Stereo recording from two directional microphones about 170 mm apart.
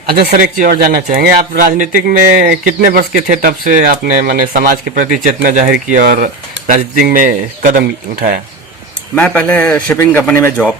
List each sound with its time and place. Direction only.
0.1 s speech: 65° right (ahead or behind)
9.1 s a man's voice: 10° left (ahead or behind)